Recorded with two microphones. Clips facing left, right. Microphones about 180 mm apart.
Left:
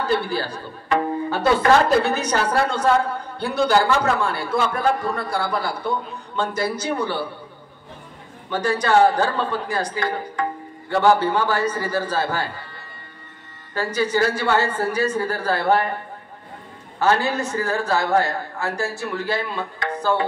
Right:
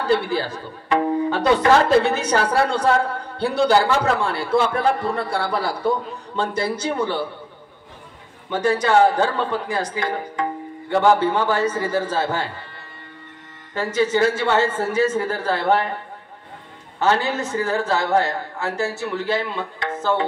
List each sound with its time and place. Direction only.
0.1 s a man's voice: 20° right (ahead or behind)
8.5 s a man's voice: 20° right (ahead or behind)
13.7 s a man's voice: 20° right (ahead or behind)
17.0 s a man's voice: 20° right (ahead or behind)